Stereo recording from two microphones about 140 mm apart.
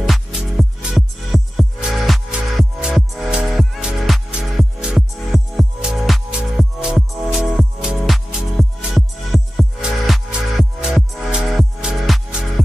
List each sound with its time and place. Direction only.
0.0 s music: centre (ahead or behind)